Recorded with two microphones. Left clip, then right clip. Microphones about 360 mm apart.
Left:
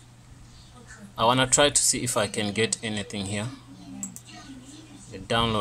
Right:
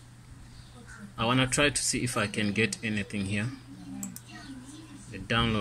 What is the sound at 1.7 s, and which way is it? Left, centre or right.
Speech, centre.